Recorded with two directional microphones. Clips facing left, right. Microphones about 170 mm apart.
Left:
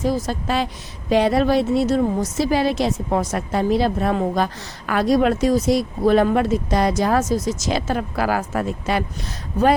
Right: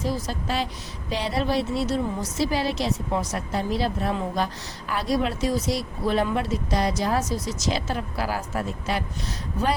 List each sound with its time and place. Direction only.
0.0 s speech: 50° left (ahead or behind)